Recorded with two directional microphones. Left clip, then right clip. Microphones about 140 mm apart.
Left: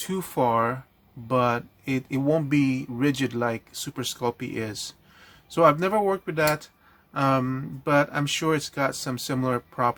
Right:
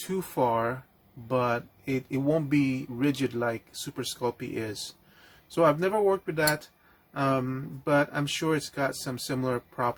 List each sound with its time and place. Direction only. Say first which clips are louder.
0.1 s speech: left 3 dB; 35° left (ahead or behind)